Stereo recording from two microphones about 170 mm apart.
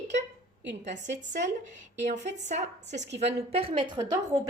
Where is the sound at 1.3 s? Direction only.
45° right (ahead or behind); by 4.2 s 25° right (ahead or behind).